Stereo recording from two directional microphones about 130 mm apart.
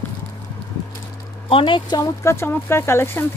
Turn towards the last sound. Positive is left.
turn(degrees=20)  # may be behind; listen again after turning